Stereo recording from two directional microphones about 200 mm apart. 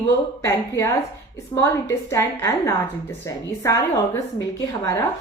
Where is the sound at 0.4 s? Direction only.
15° left (ahead or behind).